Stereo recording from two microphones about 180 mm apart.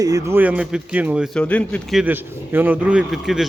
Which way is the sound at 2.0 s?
10° right (ahead or behind).